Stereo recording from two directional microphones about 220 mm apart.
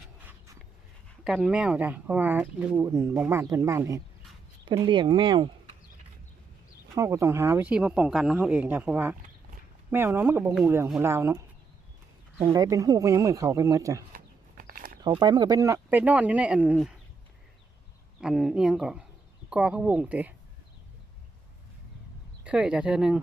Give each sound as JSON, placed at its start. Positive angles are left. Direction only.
{"t": 0.0, "sound": "vehicle", "side_deg": -10}
{"t": 1.2, "sound": "speech", "side_deg": -5}
{"t": 6.9, "sound": "speech", "side_deg": -15}
{"t": 12.4, "sound": "speech", "side_deg": -20}
{"t": 14.6, "sound": "a sound", "side_deg": -40}
{"t": 15.0, "sound": "speech", "side_deg": -20}
{"t": 18.2, "sound": "speech", "side_deg": -5}
{"t": 22.4, "sound": "speech", "side_deg": -5}